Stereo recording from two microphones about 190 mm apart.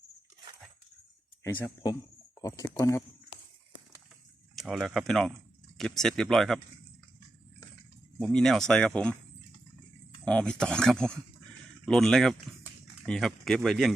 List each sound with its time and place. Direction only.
1.5 s speech: 10° left (ahead or behind)
4.5 s speech: centre (ahead or behind)
8.2 s speech: 5° left (ahead or behind)
10.2 s speech: 5° left (ahead or behind)